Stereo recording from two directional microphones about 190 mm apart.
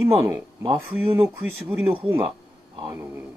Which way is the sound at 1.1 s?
10° right (ahead or behind).